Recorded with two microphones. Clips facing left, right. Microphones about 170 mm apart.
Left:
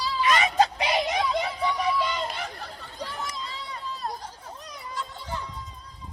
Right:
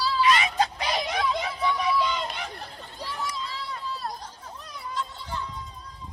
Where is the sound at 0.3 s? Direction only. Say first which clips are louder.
Left 1 dB; 45° left (ahead or behind).